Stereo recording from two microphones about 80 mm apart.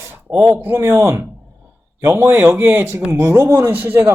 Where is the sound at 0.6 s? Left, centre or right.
Right.